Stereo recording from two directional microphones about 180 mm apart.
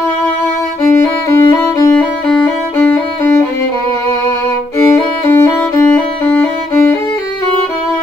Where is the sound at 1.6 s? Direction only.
20° left (ahead or behind).